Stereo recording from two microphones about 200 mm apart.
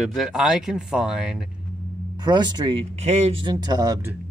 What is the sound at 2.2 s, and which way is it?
Speech, 20° right (ahead or behind).